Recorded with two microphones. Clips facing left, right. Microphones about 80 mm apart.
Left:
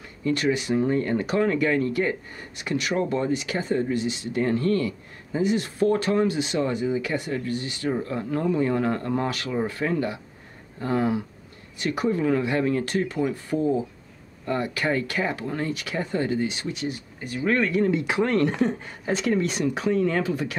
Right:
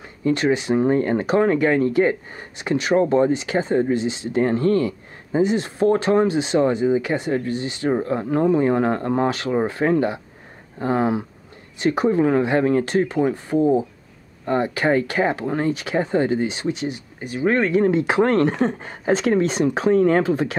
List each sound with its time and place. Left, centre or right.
0.0 s speech: right